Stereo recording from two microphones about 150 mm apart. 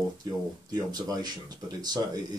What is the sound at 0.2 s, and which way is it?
Speech, 25° right (ahead or behind).